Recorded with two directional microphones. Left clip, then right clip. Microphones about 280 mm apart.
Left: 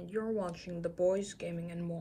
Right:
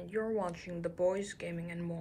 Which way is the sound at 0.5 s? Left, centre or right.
Left.